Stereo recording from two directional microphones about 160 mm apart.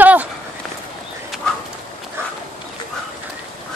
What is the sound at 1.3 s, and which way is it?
Bird, centre (ahead or behind).